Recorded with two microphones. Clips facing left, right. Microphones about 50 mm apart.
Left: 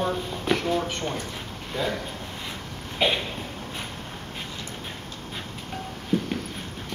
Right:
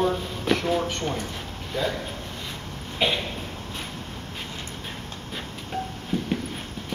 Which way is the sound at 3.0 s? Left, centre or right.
Centre.